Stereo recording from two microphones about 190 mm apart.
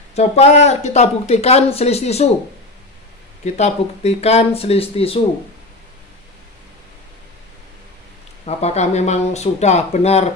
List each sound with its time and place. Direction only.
0.1 s speech: 35° left (ahead or behind)
3.5 s speech: 35° left (ahead or behind)
8.5 s speech: 35° left (ahead or behind)